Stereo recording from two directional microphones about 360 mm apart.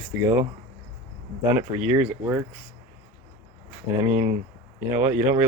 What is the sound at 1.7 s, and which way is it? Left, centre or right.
Speech, centre.